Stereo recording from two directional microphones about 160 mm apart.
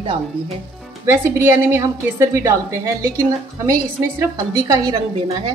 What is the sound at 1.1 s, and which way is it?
A woman's voice, 15° right (ahead or behind).